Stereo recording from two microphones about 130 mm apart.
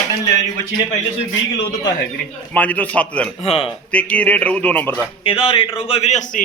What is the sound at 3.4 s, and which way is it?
Speech, 45° left (ahead or behind).